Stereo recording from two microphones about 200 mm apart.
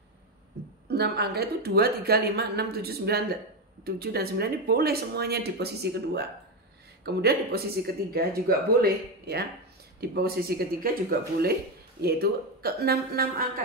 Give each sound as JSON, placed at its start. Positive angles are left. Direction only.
{"t": 0.8, "sound": "speech", "side_deg": -55}